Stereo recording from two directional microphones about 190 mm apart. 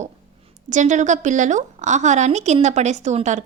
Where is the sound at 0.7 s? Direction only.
40° right (ahead or behind).